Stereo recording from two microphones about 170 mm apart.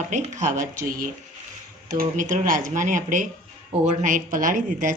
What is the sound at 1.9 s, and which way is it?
Speech, 50° right (ahead or behind).